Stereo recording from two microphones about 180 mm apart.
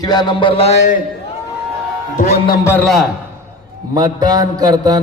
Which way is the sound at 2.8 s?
Centre (ahead or behind).